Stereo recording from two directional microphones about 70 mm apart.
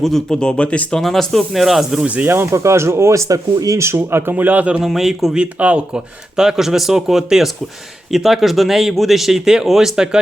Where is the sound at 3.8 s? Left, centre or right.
Right.